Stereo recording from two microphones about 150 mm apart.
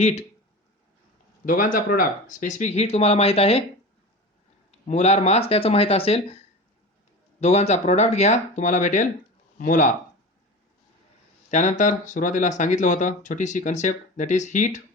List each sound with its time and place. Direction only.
0.0 s speech: 45° left (ahead or behind)
1.5 s speech: 65° left (ahead or behind); by 3.6 s 40° left (ahead or behind)
4.9 s speech: 45° left (ahead or behind)
11.5 s speech: 55° left (ahead or behind)